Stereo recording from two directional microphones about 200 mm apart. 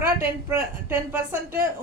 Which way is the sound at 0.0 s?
15° right (ahead or behind).